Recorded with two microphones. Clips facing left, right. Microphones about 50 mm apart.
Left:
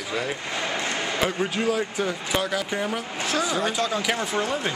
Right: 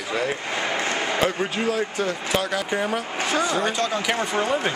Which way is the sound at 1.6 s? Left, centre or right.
Centre.